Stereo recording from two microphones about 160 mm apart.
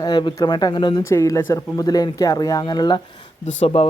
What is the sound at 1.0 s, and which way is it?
Speech, 20° left (ahead or behind).